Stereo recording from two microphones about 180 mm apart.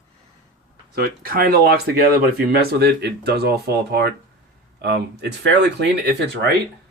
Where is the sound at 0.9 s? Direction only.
55° right (ahead or behind).